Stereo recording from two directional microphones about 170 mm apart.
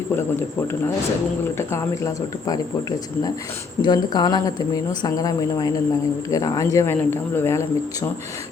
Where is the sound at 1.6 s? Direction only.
15° left (ahead or behind).